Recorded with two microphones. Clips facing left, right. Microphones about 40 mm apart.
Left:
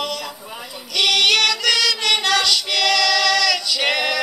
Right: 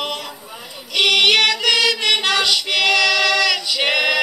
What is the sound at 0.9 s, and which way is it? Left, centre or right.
Child singing, right.